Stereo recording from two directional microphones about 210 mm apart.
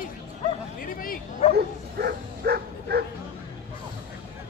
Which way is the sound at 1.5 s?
50° right (ahead or behind).